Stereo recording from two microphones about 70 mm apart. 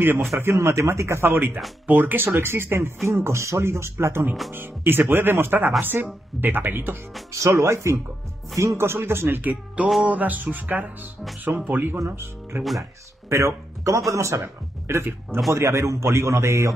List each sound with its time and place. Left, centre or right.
0.0 s speech: right
5.8 s music: right
7.3 s a man's voice: right
9.4 s music: right
12.5 s a man's voice: right